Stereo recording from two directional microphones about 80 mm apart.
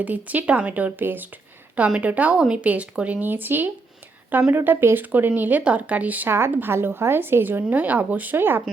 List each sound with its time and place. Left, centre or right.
0.0 s a woman's voice: centre
6.2 s speech: right